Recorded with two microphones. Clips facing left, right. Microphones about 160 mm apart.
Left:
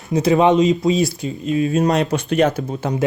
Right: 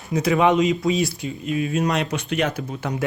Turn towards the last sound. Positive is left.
turn(degrees=25)  # may be behind; listen again after turning